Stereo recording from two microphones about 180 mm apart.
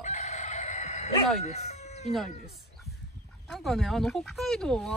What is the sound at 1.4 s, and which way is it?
Chicken, 40° left (ahead or behind).